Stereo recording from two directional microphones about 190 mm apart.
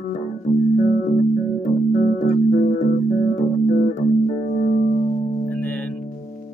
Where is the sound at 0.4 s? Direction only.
40° left (ahead or behind).